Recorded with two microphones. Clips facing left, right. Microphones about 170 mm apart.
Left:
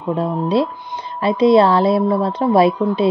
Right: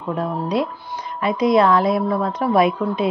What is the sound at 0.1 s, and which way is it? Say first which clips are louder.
A woman's voice: left 4 dB; 30° left (ahead or behind).